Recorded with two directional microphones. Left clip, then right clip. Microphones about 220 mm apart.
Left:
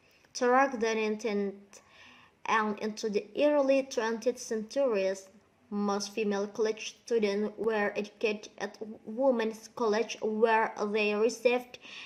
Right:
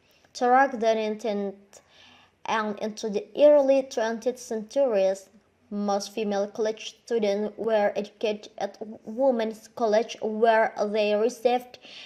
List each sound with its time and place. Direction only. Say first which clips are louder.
0.3 s speech: right 5 dB; 20° right (ahead or behind)